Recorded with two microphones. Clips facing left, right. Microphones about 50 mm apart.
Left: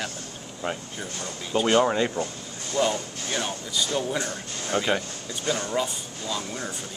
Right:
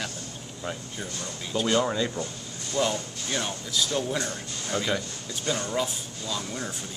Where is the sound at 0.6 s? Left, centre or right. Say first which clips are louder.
Left 3 dB; left.